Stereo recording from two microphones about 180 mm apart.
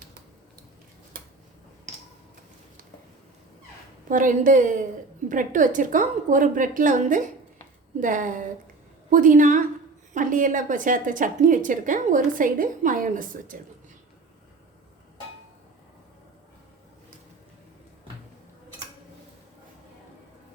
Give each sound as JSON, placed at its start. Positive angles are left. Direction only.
{"t": 4.1, "sound": "a woman's voice", "side_deg": -45}